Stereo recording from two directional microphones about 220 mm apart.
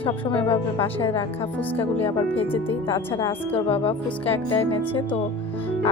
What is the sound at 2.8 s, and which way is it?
Speech, 20° left (ahead or behind).